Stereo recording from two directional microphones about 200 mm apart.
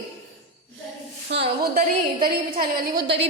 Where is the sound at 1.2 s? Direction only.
55° right (ahead or behind).